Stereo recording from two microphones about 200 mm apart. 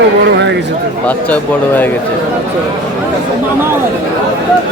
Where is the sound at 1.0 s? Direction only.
10° left (ahead or behind).